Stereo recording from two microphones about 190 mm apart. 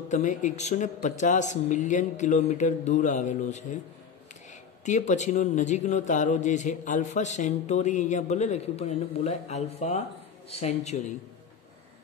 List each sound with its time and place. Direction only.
0.1 s a man's voice: 40° left (ahead or behind)
4.8 s a man's voice: 40° left (ahead or behind)